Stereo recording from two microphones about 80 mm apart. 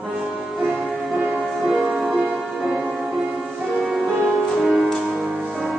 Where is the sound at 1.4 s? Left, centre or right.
Centre.